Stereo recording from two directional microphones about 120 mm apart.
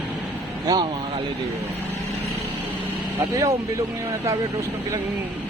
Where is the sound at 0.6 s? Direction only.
30° right (ahead or behind).